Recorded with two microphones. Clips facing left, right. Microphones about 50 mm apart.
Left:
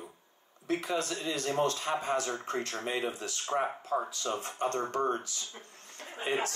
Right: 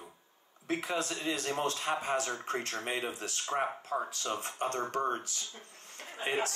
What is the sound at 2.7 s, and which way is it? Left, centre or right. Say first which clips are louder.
Speech: left 2 dB; right.